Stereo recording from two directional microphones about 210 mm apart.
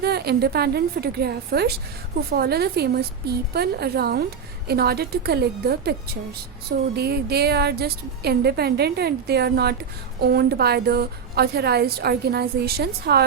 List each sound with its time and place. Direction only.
0.0 s a woman's voice: 50° right (ahead or behind)